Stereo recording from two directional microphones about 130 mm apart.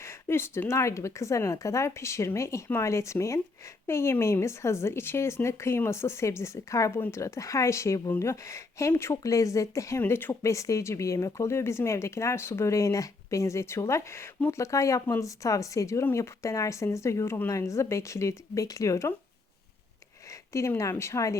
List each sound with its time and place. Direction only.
0.0 s speech: 20° left (ahead or behind)
20.5 s speech: 20° left (ahead or behind)